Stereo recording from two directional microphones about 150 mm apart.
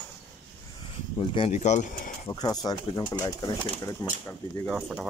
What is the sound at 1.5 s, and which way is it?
Speech, 50° left (ahead or behind).